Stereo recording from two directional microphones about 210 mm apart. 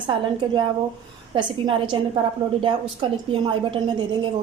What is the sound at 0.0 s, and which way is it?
A woman's voice, 20° right (ahead or behind).